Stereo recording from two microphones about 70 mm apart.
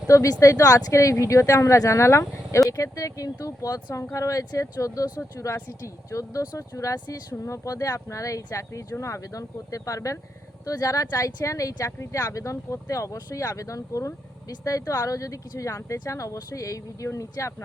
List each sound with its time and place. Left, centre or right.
0.1 s a woman's voice: left
5.0 s speech: left
5.8 s a woman's voice: left
6.9 s speech: left
7.4 s a woman's voice: left